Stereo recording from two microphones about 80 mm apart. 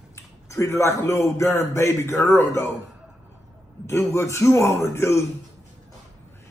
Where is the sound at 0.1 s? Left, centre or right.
Left.